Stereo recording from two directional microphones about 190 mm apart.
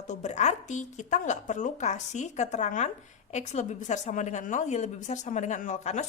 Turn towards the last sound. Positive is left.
turn(degrees=40)  # may be behind; listen again after turning